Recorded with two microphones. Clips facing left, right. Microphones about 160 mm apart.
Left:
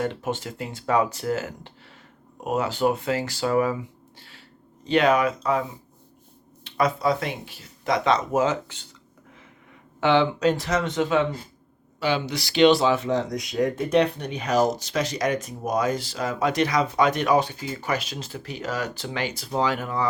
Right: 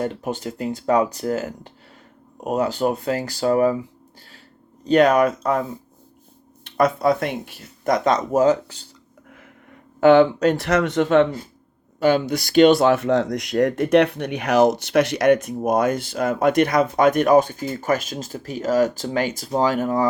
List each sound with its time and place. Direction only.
0.0 s speech: 40° right (ahead or behind)
4.9 s speech: 45° right (ahead or behind)
6.7 s speech: 50° right (ahead or behind); by 8.9 s 35° right (ahead or behind)
10.0 s speech: 45° right (ahead or behind)